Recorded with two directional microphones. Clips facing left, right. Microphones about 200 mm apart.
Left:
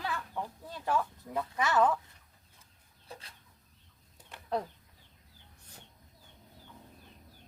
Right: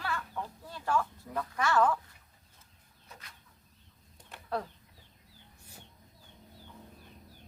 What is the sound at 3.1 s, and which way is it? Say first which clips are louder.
Chicken: left 5 dB; 30° left (ahead or behind).